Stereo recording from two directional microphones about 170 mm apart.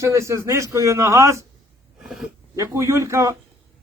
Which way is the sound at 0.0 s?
15° right (ahead or behind).